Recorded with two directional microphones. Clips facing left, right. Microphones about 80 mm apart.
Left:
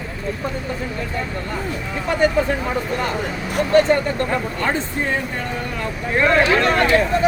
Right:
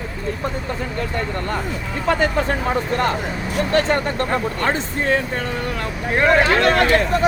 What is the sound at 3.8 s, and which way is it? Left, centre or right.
Speech, right.